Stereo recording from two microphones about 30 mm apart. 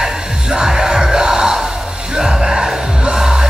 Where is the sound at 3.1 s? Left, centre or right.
Right.